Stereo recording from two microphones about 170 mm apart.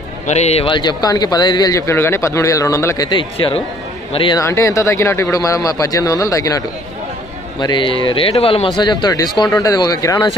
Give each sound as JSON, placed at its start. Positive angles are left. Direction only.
{"t": 0.3, "sound": "a man's voice", "side_deg": 40}
{"t": 4.4, "sound": "a man's voice", "side_deg": 20}
{"t": 7.6, "sound": "a man's voice", "side_deg": 30}